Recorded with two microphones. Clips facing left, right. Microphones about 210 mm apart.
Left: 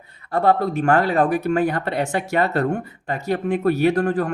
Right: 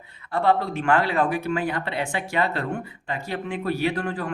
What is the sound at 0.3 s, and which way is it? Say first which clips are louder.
Speech: left 3 dB; 45° left (ahead or behind).